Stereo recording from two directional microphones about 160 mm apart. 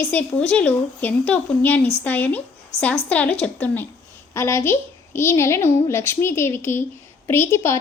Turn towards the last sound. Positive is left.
turn(degrees=15)  # may be behind; listen again after turning